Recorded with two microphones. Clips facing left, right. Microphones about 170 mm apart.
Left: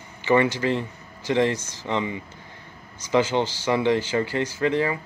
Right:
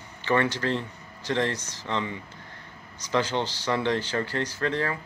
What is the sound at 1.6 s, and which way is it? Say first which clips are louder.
Speech: left 3 dB; 50° left (ahead or behind).